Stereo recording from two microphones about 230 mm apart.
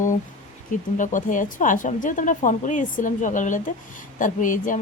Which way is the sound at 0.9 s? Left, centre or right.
Left.